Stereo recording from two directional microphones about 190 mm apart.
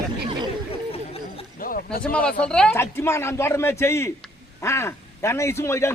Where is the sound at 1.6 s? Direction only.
50° left (ahead or behind).